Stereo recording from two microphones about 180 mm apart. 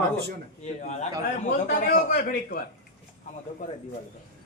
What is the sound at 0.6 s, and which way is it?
A man's voice, 40° left (ahead or behind).